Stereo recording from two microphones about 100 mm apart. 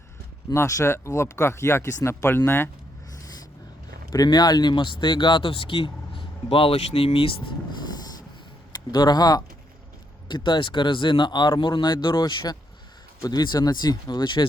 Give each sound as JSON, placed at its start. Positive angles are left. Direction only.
{"t": 0.5, "sound": "speech", "side_deg": 25}
{"t": 4.1, "sound": "speech", "side_deg": 40}
{"t": 8.7, "sound": "speech", "side_deg": 45}